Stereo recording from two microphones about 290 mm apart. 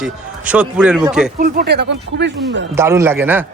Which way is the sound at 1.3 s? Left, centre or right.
Right.